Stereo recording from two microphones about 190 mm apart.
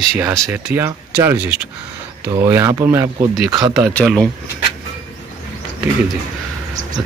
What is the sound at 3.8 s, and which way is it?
Speech, centre (ahead or behind).